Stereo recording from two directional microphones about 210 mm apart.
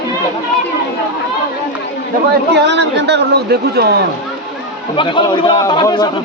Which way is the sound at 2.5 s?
55° right (ahead or behind).